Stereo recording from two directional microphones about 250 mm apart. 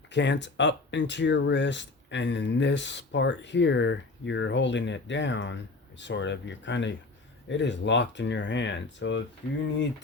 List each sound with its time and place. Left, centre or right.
0.1 s speech: left